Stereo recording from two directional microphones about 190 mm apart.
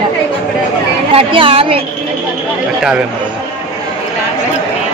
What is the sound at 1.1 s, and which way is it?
Speech, 30° right (ahead or behind).